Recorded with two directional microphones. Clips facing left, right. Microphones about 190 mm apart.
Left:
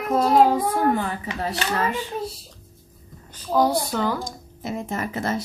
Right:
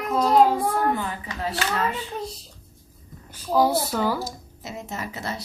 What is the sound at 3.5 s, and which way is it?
Speech, 5° right (ahead or behind).